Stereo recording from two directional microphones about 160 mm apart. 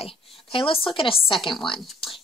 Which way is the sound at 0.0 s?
35° left (ahead or behind).